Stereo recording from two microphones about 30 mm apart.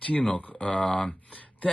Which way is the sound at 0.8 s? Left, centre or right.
Centre.